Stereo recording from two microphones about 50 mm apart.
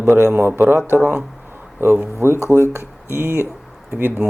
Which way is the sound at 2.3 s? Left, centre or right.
Left.